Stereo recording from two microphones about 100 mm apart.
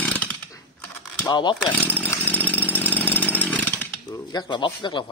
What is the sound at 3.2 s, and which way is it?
Chainsaw, 15° left (ahead or behind).